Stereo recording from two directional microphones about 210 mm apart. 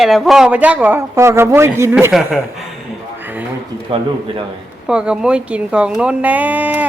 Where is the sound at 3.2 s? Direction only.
10° right (ahead or behind).